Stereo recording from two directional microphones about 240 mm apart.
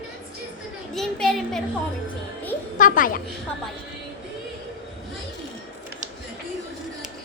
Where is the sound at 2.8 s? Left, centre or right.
Left.